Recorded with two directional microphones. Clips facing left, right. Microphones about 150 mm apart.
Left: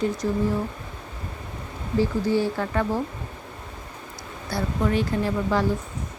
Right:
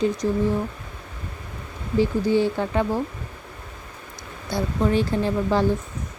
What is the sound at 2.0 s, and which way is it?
Speech, 20° right (ahead or behind).